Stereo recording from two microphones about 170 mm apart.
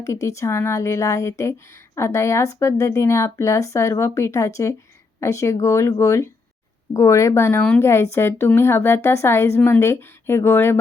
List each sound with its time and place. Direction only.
0.0 s speech: 15° left (ahead or behind)